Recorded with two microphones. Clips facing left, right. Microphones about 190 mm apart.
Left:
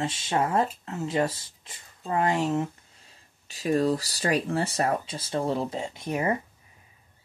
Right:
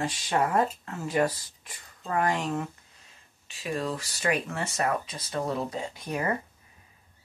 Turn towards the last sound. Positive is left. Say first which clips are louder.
# left 3 dB
turn(degrees=20)  # may be behind; listen again after turning